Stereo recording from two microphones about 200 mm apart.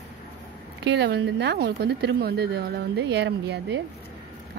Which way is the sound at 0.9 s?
60° right (ahead or behind).